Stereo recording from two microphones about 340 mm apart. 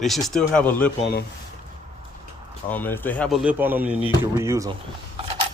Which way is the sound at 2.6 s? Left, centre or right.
Centre.